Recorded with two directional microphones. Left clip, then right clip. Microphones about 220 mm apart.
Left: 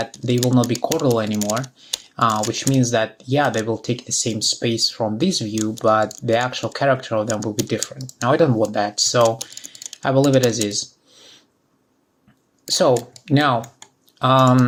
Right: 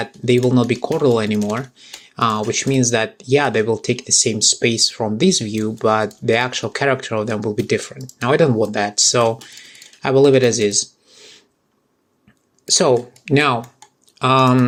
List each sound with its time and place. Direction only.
0.3 s speech: 25° right (ahead or behind)
12.7 s speech: 30° right (ahead or behind)